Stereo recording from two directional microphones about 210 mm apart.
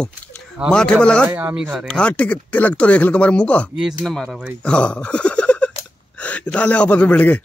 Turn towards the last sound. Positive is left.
turn(degrees=5)  # may be behind; listen again after turning